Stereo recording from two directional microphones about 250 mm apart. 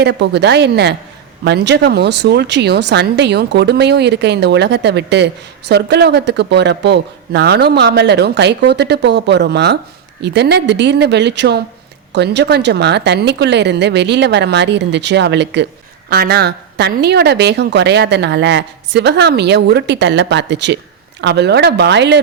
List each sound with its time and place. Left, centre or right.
0.0 s speech: right